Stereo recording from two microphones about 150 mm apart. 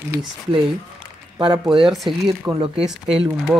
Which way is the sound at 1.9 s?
Centre (ahead or behind).